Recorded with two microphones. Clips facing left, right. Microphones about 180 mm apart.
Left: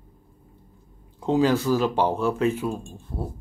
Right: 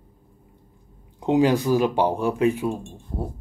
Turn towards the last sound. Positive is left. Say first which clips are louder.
# right 2 dB
turn(degrees=-15)  # may be behind; listen again after turning